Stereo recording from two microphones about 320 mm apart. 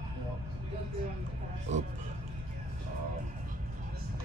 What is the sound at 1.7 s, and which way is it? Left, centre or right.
Speech, right.